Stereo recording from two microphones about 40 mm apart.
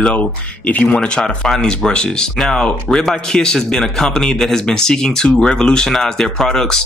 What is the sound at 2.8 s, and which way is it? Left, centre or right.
Speech, centre.